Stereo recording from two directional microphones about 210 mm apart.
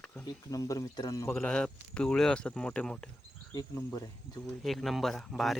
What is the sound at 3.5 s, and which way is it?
Speech, 15° left (ahead or behind).